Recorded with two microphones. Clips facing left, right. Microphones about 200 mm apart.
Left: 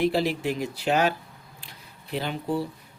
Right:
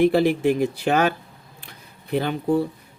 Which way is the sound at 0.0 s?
55° right (ahead or behind).